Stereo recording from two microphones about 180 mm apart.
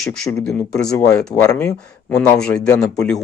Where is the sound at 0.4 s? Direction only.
5° left (ahead or behind).